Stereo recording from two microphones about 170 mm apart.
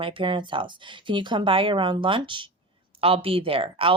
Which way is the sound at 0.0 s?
30° right (ahead or behind).